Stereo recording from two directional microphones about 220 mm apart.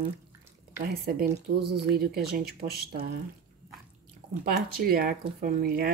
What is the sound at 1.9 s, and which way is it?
Speech, 45° right (ahead or behind).